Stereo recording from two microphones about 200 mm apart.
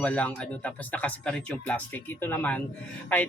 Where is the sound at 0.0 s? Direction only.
5° left (ahead or behind).